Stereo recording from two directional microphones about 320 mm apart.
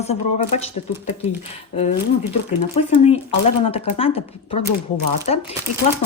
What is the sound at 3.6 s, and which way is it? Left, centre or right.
A woman's voice, centre.